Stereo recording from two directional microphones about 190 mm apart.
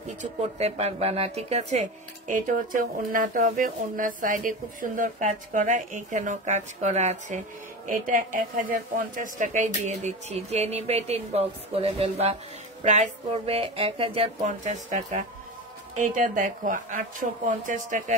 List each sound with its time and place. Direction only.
0.2 s speech: 35° right (ahead or behind)